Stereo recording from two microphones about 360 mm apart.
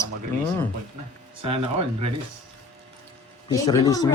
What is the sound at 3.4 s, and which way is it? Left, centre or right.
Speech, centre.